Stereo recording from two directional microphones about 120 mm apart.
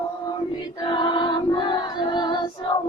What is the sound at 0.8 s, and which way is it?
Choir, 40° left (ahead or behind).